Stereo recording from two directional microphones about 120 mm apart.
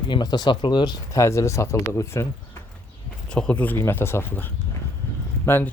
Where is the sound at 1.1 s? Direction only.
25° left (ahead or behind).